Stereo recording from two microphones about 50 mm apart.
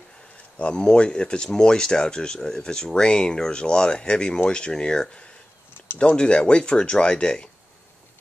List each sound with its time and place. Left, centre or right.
0.6 s speech: centre